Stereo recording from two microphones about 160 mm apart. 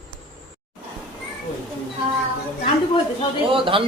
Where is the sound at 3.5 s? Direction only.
35° right (ahead or behind).